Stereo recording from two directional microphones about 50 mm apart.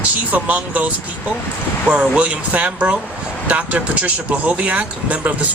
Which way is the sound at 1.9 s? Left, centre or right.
Right.